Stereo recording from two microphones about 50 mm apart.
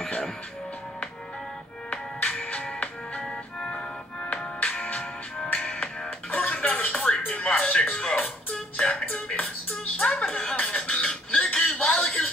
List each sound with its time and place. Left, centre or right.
0.0 s music: centre
1.9 s music: centre
7.1 s music: centre
10.6 s a sound: centre